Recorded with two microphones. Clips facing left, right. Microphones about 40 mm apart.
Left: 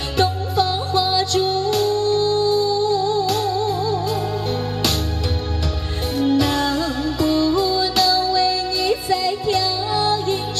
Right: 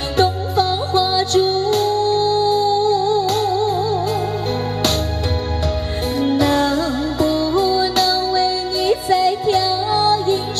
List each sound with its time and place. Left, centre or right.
0.2 s music: right
6.3 s music: right